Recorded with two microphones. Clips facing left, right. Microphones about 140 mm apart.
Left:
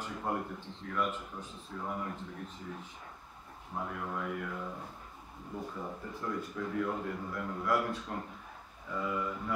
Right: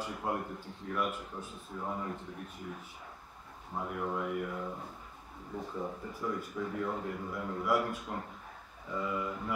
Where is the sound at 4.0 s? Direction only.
20° right (ahead or behind).